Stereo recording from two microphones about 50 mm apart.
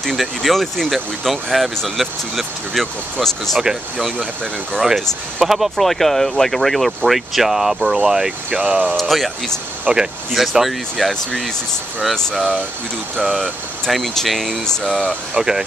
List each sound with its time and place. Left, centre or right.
0.0 s speech: centre
4.9 s speech: centre
8.5 s speech: right
8.9 s speech: centre
13.3 s speech: centre
15.3 s speech: centre